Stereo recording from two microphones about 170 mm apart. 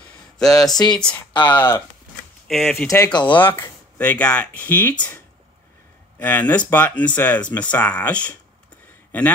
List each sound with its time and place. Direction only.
0.5 s speech: 20° left (ahead or behind)
0.9 s speech: 5° left (ahead or behind)
1.3 s speech: 30° left (ahead or behind)
2.4 s speech: centre (ahead or behind)
2.9 s speech: 25° left (ahead or behind)
3.5 s speech: 15° left (ahead or behind)
6.1 s speech: 10° left (ahead or behind)